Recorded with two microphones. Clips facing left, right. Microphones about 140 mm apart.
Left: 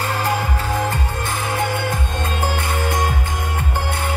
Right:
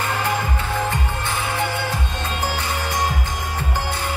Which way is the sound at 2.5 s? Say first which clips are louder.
Left 3 dB; 55° left (ahead or behind).